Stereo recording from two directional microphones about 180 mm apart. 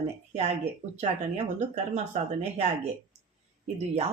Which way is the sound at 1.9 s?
40° right (ahead or behind).